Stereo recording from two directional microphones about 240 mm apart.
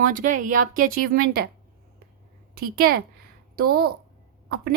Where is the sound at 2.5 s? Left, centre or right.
Right.